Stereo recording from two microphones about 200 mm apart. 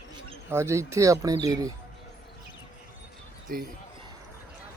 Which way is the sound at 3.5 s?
45° right (ahead or behind).